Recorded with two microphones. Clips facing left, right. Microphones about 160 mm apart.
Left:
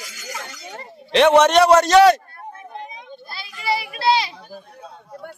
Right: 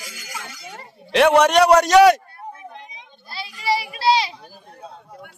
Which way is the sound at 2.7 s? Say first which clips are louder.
Left 7 dB; 50° left (ahead or behind).